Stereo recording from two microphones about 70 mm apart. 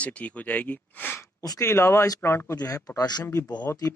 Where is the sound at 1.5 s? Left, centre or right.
Left.